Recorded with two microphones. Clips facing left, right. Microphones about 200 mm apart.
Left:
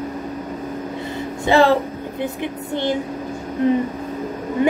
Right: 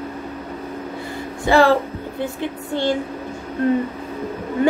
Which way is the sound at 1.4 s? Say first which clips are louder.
Even; 20° left (ahead or behind).